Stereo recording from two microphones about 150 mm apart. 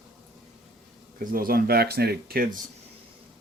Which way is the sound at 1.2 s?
75° right (ahead or behind).